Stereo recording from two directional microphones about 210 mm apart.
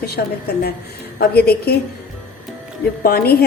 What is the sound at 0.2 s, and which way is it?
A woman's voice, 45° left (ahead or behind).